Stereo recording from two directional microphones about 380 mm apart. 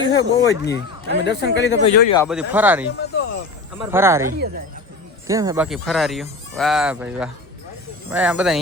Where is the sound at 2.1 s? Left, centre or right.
Centre.